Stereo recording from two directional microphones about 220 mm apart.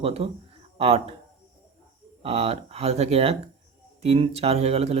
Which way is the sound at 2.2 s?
25° right (ahead or behind).